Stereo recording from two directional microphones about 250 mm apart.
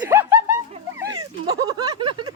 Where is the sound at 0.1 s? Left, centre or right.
Centre.